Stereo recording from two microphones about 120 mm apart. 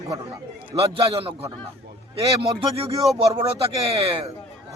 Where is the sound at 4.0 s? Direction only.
50° right (ahead or behind).